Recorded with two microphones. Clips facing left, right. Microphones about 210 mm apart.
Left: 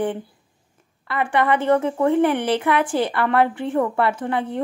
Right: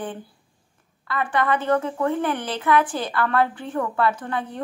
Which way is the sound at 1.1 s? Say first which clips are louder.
Left 3 dB; 25° left (ahead or behind).